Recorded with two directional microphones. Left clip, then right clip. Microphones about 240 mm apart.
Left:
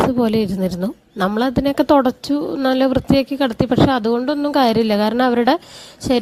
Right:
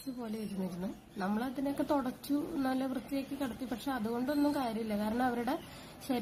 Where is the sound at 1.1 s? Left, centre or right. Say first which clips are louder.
Left 19 dB; left.